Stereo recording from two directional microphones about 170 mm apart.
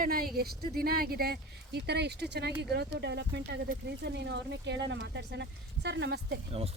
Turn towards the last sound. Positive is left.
turn(degrees=-75)  # may be behind; listen again after turning